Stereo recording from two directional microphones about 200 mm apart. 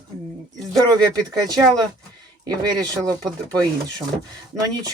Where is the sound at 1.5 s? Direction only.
20° right (ahead or behind).